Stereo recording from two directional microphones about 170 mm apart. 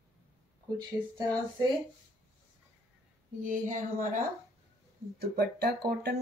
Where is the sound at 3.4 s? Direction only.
50° right (ahead or behind).